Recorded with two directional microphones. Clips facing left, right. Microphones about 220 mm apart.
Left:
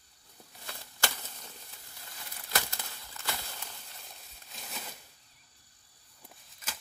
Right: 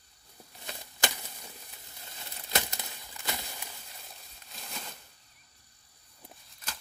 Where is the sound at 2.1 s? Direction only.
25° right (ahead or behind).